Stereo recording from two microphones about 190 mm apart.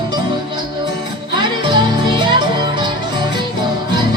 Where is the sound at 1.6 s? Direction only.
25° right (ahead or behind).